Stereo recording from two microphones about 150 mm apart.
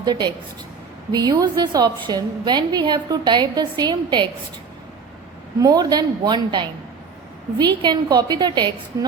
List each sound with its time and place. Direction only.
0.0 s a woman's voice: 30° right (ahead or behind)
5.5 s a woman's voice: 25° right (ahead or behind)